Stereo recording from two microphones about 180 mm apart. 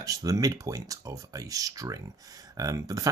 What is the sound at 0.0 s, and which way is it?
Speech, 20° right (ahead or behind).